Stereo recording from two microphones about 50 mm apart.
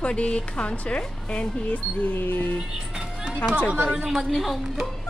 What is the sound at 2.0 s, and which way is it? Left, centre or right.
Speech, left.